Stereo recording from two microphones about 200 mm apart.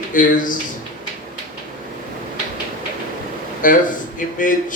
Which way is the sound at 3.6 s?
40° left (ahead or behind).